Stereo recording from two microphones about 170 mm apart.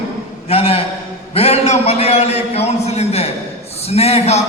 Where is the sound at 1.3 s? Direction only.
35° left (ahead or behind).